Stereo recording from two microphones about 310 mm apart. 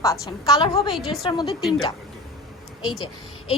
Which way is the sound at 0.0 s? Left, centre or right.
Centre.